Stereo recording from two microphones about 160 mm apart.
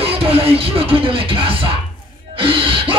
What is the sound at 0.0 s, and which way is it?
Music, 35° right (ahead or behind).